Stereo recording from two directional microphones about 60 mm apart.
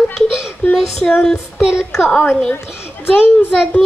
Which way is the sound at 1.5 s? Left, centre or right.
Centre.